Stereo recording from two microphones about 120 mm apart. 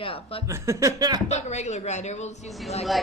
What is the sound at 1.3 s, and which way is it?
A woman's voice, 70° left (ahead or behind).